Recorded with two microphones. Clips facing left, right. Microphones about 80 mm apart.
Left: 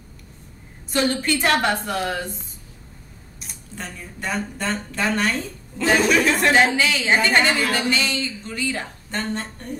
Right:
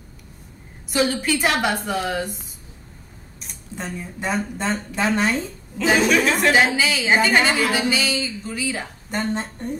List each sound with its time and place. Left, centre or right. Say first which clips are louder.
0.8 s a woman's voice: even; centre
3.4 s a sound: even; centre
3.7 s speech: right 4 dB; centre
5.8 s a woman's voice: even; centre
9.1 s speech: right 3 dB; centre